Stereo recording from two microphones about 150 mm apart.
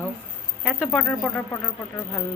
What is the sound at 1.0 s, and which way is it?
Speech, 10° left (ahead or behind).